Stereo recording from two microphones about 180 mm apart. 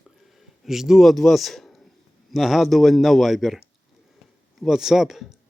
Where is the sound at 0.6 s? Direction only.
Centre (ahead or behind).